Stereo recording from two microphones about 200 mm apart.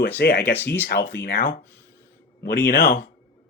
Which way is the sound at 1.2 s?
45° left (ahead or behind).